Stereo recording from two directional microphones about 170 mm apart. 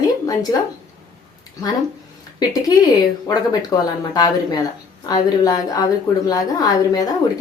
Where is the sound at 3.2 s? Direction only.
20° left (ahead or behind).